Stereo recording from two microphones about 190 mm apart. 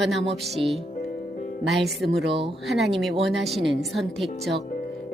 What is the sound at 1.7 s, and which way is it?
Speech, centre (ahead or behind).